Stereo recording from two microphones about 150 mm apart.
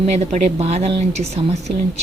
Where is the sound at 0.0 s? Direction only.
50° right (ahead or behind).